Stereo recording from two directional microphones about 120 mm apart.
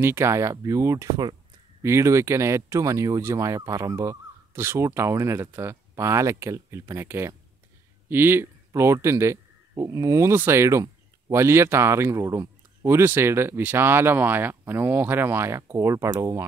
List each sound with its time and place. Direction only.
0.0 s speech: 20° right (ahead or behind)